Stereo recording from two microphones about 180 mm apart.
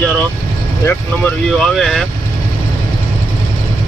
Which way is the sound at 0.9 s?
5° left (ahead or behind).